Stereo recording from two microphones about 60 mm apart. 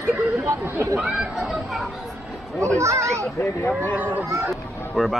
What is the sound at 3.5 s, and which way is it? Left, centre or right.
Speech, left.